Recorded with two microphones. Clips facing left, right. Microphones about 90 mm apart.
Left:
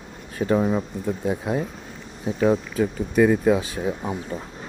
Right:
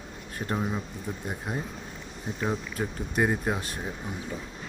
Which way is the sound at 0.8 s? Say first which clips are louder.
Left 9 dB; 90° left.